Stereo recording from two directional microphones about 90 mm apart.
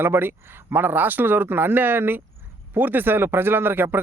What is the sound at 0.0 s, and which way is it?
Speech, 25° right (ahead or behind).